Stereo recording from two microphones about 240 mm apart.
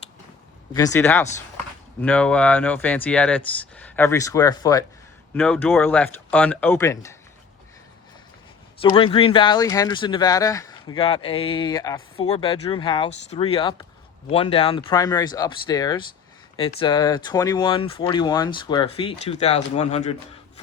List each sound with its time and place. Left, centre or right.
0.7 s speech: centre
8.8 s speech: left